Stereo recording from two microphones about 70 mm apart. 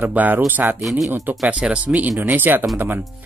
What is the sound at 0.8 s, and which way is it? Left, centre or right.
Speech, centre.